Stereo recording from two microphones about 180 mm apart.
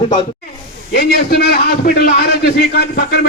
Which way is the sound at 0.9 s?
60° left (ahead or behind).